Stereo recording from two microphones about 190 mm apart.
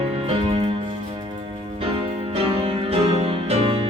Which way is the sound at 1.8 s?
30° right (ahead or behind).